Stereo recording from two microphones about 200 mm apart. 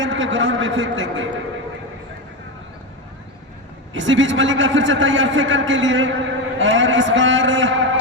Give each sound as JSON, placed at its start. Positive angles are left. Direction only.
{"t": 0.0, "sound": "a man's voice", "side_deg": -70}
{"t": 3.9, "sound": "a man's voice", "side_deg": -70}